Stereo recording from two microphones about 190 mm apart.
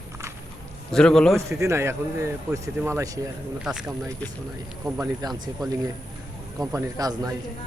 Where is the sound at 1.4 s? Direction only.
15° right (ahead or behind).